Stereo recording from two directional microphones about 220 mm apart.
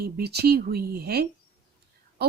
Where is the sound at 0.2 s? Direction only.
45° right (ahead or behind).